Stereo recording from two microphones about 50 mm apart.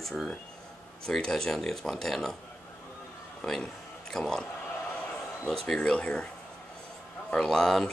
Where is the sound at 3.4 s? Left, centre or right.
Centre.